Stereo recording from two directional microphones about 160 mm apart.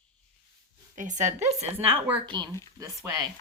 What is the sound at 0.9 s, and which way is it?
A woman's voice, 50° right (ahead or behind).